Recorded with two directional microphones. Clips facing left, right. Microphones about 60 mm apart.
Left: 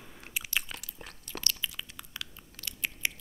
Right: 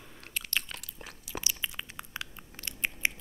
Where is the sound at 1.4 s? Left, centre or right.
Right.